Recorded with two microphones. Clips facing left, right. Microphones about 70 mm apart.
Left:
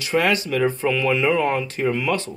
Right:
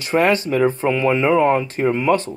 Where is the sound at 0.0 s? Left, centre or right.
Right.